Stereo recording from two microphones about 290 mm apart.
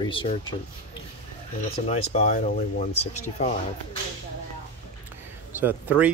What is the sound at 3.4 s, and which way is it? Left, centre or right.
Speech, left.